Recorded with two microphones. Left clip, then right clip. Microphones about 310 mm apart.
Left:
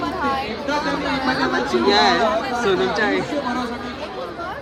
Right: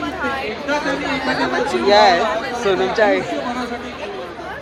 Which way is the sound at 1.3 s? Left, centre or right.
Centre.